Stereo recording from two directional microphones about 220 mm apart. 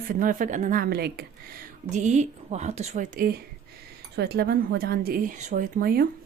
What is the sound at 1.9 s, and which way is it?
A woman's voice, 30° right (ahead or behind).